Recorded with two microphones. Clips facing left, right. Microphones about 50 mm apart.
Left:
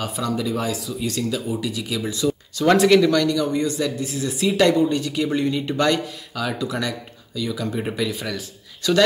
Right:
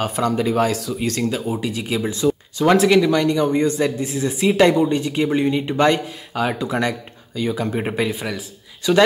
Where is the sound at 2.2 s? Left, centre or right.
Centre.